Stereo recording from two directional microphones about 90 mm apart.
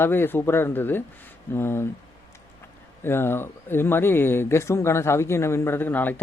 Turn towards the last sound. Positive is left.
turn(degrees=20)  # may be behind; listen again after turning